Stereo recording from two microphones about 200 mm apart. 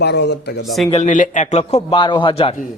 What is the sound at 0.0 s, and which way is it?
Speech, 55° left (ahead or behind).